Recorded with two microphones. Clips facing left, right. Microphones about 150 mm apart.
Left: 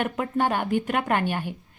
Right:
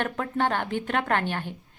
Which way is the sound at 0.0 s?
10° left (ahead or behind).